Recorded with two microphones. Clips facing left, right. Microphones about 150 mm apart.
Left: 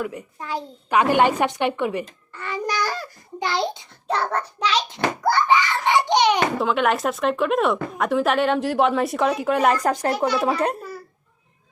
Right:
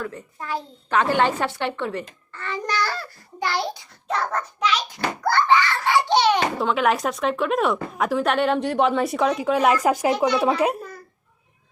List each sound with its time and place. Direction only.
0.0 s a woman's voice: 15° left (ahead or behind); by 4.9 s 30° left (ahead or behind)
5.2 s belly laugh: 15° left (ahead or behind)
6.6 s a woman's voice: centre (ahead or behind)
10.1 s a woman's voice: 5° left (ahead or behind)